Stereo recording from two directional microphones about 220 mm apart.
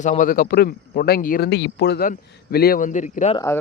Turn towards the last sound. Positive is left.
turn(degrees=15)  # may be behind; listen again after turning